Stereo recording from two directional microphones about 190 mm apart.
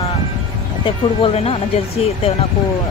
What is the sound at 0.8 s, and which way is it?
Speech, 30° left (ahead or behind).